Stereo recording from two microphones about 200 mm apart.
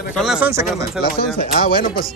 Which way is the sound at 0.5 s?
15° right (ahead or behind).